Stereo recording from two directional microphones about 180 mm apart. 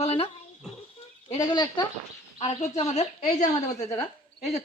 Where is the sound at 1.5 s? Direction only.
25° left (ahead or behind).